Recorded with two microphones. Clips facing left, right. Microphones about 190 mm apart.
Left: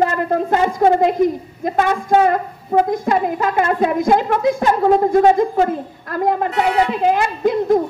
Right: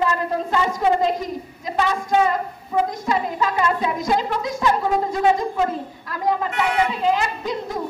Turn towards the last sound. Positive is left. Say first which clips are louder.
# left 11 dB
turn(degrees=55)  # may be behind; listen again after turning